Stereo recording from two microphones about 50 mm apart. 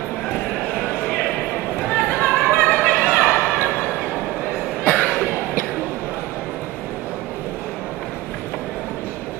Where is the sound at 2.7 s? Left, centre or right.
Left.